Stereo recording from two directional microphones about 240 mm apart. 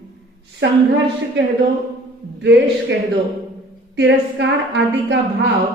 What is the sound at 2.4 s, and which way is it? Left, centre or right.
Speech, right.